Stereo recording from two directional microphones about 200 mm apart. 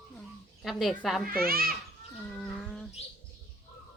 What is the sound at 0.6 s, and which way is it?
Speech, centre (ahead or behind).